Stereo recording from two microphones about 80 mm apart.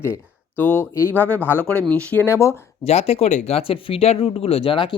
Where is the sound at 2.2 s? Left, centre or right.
Left.